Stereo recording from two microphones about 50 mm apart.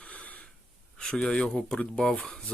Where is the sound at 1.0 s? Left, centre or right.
Centre.